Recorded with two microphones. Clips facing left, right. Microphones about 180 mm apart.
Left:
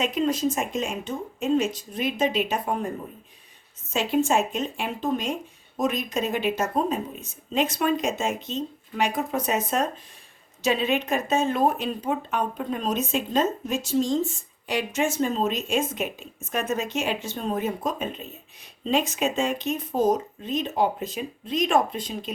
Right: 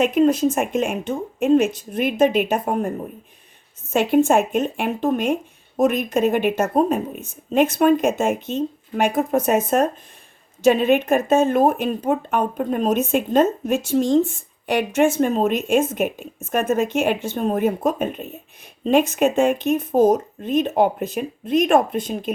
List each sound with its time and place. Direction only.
0.0 s speech: 55° right (ahead or behind)
3.9 s speech: 55° right (ahead or behind)